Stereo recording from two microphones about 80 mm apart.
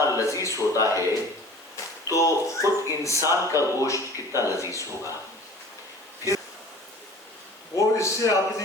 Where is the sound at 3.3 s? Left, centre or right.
Right.